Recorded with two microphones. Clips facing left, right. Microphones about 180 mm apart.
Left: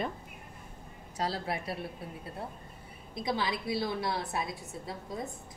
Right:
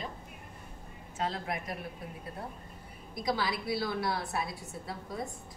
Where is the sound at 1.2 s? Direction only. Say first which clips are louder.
Left 1 dB; 35° left (ahead or behind).